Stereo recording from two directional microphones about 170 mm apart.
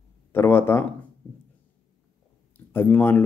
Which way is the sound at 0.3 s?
15° left (ahead or behind).